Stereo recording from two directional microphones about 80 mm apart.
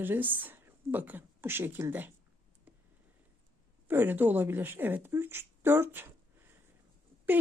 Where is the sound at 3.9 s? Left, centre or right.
Right.